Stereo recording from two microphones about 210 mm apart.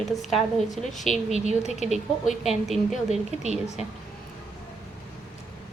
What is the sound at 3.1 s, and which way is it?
Speech, 30° right (ahead or behind).